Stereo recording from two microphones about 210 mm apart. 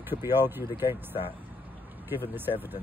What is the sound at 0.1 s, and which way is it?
Speech, 10° right (ahead or behind).